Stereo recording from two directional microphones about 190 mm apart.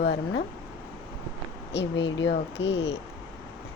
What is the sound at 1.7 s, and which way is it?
Speech, 65° left (ahead or behind).